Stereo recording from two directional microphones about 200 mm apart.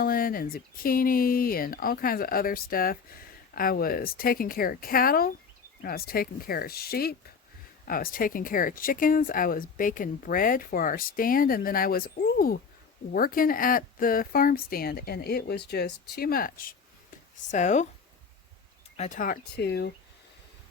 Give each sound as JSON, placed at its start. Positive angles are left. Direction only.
{"t": 0.0, "sound": "speech", "side_deg": 45}
{"t": 18.9, "sound": "speech", "side_deg": 40}